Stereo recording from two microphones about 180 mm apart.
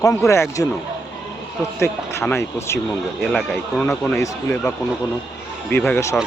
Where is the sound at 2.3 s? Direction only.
15° left (ahead or behind).